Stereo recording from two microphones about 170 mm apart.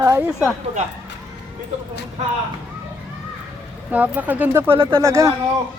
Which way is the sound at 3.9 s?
10° right (ahead or behind).